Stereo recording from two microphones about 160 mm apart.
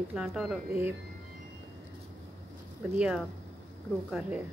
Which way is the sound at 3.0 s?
Centre (ahead or behind).